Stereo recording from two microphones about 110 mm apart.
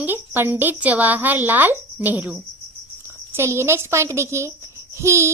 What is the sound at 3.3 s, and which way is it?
A woman's voice, 25° right (ahead or behind).